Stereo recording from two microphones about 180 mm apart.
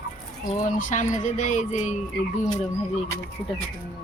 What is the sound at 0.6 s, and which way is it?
Speech, 45° left (ahead or behind).